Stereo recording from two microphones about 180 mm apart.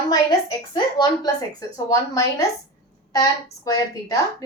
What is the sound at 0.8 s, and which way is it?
Speech, 25° left (ahead or behind).